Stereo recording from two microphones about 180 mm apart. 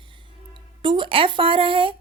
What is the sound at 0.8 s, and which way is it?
A woman's voice, 25° right (ahead or behind).